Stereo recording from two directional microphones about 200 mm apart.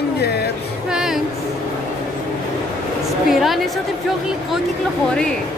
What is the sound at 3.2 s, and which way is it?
Speech, centre (ahead or behind).